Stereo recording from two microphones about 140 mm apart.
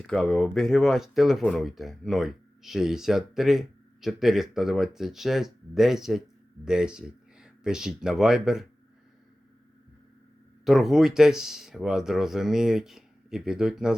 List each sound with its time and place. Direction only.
0.0 s speech: centre (ahead or behind)
10.7 s speech: centre (ahead or behind)